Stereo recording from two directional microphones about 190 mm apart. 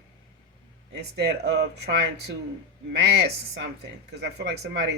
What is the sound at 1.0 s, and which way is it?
Speech, 60° right (ahead or behind).